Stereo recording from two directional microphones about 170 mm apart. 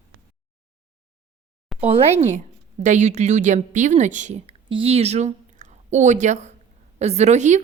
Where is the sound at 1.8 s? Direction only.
40° right (ahead or behind).